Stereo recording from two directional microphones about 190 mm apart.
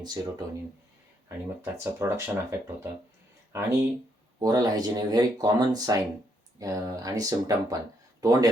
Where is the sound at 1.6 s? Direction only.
15° right (ahead or behind).